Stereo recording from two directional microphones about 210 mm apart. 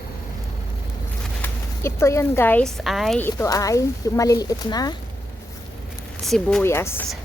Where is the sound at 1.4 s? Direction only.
10° left (ahead or behind).